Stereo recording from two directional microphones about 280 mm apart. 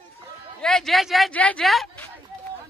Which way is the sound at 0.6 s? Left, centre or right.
Centre.